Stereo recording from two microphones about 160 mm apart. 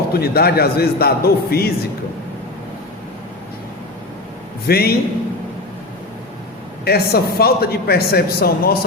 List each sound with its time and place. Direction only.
0.1 s speech: 75° left (ahead or behind)
4.6 s speech: 75° left (ahead or behind)
6.8 s speech: 75° left (ahead or behind)